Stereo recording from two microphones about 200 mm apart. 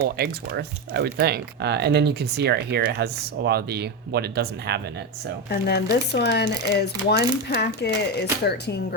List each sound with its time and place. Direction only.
0.2 s speech: 55° right (ahead or behind)
5.5 s speech: 55° left (ahead or behind)